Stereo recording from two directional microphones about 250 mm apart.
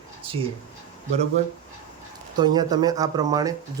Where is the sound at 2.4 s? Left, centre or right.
Centre.